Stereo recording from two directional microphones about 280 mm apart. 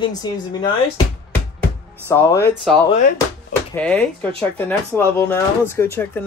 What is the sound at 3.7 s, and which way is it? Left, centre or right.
Speech, centre.